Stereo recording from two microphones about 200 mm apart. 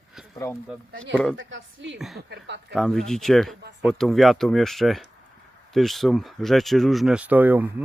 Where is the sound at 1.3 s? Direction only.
65° right (ahead or behind).